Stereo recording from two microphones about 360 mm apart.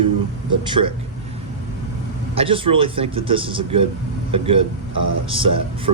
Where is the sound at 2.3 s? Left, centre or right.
Centre.